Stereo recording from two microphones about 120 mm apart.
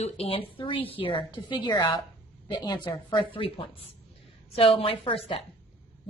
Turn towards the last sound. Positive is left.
turn(degrees=50)  # may be behind; listen again after turning